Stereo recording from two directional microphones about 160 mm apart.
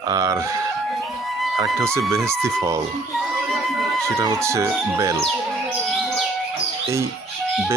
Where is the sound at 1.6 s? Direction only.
20° right (ahead or behind).